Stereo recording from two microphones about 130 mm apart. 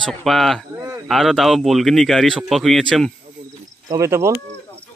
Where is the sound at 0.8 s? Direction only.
25° right (ahead or behind).